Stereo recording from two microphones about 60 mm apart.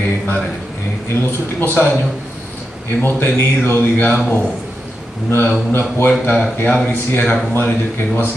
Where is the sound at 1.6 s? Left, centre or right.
Left.